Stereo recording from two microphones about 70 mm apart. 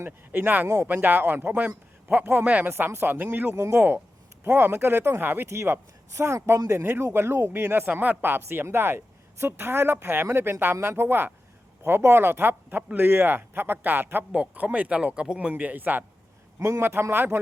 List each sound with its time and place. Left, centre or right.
0.0 s speech: right
2.6 s speech: right
3.5 s a man's voice: right
16.6 s a man's voice: right
16.8 s a man's voice: right